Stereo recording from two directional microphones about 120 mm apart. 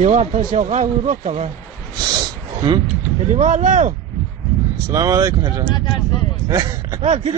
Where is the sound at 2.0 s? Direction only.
35° right (ahead or behind).